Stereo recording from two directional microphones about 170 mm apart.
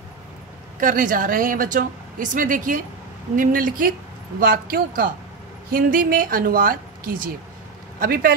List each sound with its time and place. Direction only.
0.7 s speech: 50° right (ahead or behind)